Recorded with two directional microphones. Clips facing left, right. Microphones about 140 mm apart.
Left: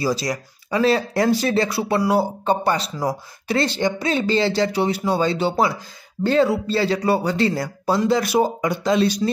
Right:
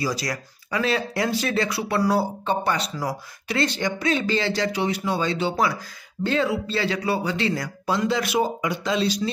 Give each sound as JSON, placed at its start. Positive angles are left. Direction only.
{"t": 0.0, "sound": "a man's voice", "side_deg": 25}
{"t": 2.0, "sound": "speech", "side_deg": 15}
{"t": 2.4, "sound": "a man's voice", "side_deg": 35}